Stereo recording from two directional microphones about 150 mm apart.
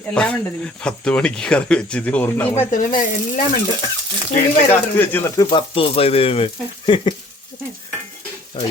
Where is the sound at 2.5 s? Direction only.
60° left (ahead or behind).